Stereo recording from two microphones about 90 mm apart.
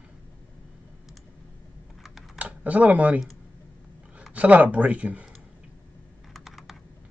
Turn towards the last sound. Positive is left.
turn(degrees=0)  # may be behind; listen again after turning